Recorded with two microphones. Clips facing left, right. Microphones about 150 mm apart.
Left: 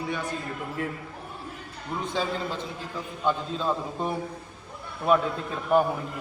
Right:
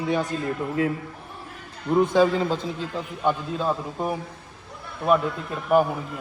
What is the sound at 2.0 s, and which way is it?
Speech, 50° right (ahead or behind).